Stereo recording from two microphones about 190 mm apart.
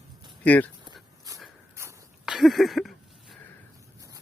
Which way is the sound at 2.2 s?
Centre (ahead or behind).